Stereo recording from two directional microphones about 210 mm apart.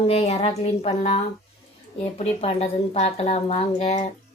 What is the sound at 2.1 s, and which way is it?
Speech, 30° left (ahead or behind).